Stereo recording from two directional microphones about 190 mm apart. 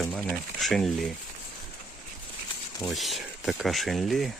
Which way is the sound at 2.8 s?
Centre (ahead or behind).